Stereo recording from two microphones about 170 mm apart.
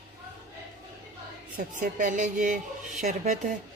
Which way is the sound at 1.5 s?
50° right (ahead or behind).